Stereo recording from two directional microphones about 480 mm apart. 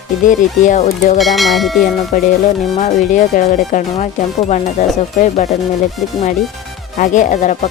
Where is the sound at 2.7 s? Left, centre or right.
Centre.